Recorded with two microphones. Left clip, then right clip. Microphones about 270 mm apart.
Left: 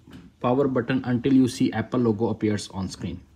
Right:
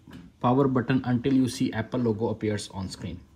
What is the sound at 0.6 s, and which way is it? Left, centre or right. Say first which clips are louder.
Speech: left 1 dB; centre.